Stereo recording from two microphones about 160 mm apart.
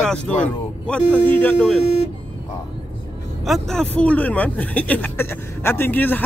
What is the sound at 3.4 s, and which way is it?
Speech, centre (ahead or behind).